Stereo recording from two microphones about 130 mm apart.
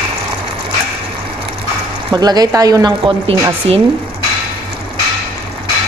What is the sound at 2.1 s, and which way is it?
Speech, 30° right (ahead or behind).